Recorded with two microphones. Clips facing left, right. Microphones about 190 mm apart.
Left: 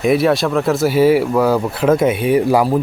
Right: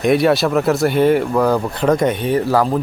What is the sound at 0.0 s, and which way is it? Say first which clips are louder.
Speech: even; centre (ahead or behind).